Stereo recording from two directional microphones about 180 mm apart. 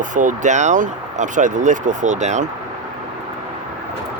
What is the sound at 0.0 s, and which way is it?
Speech, 45° right (ahead or behind).